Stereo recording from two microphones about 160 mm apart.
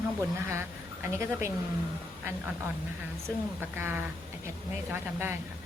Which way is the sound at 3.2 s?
15° right (ahead or behind).